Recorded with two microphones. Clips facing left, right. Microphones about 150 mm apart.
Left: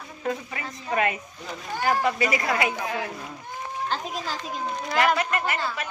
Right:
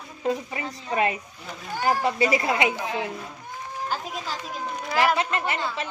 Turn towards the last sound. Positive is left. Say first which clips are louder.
# even
turn(degrees=-25)  # may be behind; listen again after turning